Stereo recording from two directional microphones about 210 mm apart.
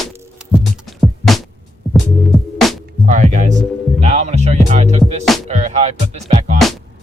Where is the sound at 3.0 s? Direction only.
35° right (ahead or behind).